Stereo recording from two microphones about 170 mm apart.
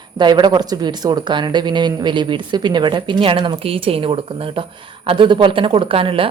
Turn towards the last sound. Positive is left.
turn(degrees=-30)  # may be behind; listen again after turning